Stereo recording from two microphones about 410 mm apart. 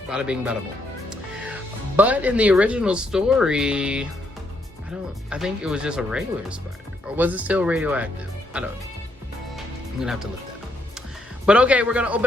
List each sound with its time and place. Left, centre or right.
0.1 s speech: centre
2.0 s speech: centre
5.3 s speech: centre
10.0 s speech: centre
11.4 s speech: centre